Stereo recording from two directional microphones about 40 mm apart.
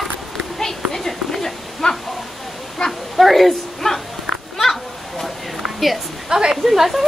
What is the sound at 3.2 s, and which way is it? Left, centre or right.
Speech, centre.